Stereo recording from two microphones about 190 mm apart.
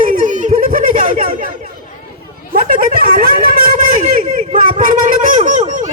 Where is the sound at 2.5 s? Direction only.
45° right (ahead or behind).